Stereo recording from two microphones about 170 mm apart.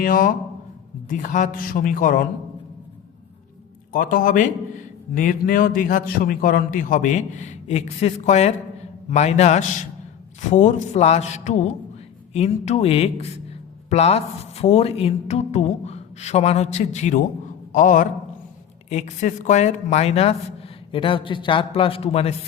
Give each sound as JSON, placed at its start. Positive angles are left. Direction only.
{"t": 0.0, "sound": "a man's voice", "side_deg": 50}
{"t": 3.9, "sound": "a man's voice", "side_deg": 55}